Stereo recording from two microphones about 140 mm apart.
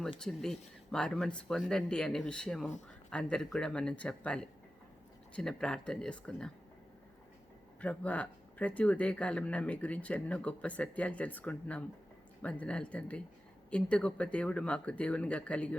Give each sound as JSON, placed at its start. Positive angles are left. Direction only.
{"t": 0.2, "sound": "speech", "side_deg": 5}
{"t": 7.8, "sound": "speech", "side_deg": 10}